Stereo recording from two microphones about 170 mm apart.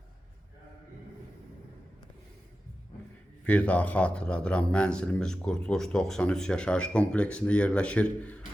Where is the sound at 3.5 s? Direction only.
10° left (ahead or behind).